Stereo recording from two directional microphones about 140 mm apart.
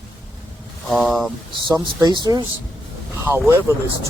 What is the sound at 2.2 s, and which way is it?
Speech, 30° right (ahead or behind).